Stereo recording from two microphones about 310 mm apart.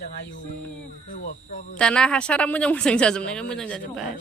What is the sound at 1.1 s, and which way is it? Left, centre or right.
Speech, left.